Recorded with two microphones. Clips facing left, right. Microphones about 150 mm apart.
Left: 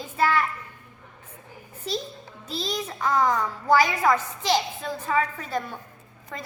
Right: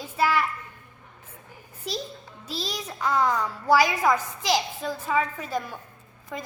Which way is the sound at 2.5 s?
5° right (ahead or behind).